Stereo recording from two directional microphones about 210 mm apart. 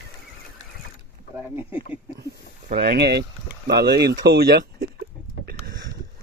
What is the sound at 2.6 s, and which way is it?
Speech, 45° right (ahead or behind).